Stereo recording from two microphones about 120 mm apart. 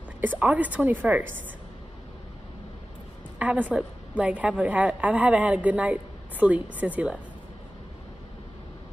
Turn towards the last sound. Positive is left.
turn(degrees=-15)  # may be behind; listen again after turning